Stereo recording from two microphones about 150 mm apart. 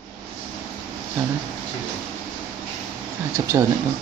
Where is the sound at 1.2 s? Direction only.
15° right (ahead or behind).